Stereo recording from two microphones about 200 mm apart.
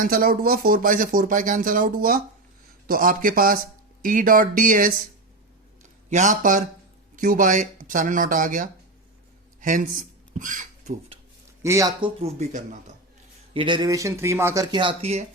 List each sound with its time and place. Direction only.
0.0 s speech: 45° right (ahead or behind)
9.6 s a sound: 40° right (ahead or behind)
11.6 s speech: 15° right (ahead or behind); by 12.6 s 35° right (ahead or behind)
13.5 s speech: 25° right (ahead or behind)